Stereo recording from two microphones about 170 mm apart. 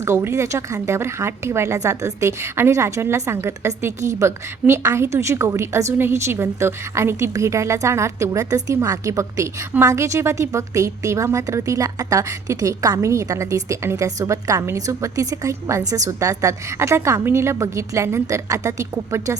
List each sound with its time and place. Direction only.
0.0 s a woman's voice: 15° right (ahead or behind)